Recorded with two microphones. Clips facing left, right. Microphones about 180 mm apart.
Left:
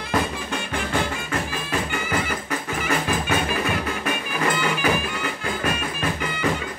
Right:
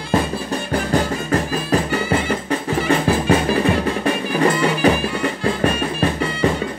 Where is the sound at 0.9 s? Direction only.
35° right (ahead or behind).